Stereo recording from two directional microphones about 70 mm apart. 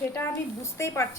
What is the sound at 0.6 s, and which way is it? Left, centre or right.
Speech, left.